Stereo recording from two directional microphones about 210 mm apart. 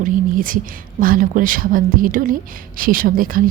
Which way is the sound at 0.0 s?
40° right (ahead or behind).